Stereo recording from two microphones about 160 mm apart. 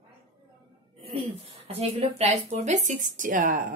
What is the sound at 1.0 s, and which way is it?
Speech, 35° right (ahead or behind).